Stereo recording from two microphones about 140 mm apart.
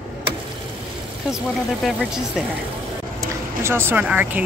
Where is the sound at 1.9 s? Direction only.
Centre (ahead or behind).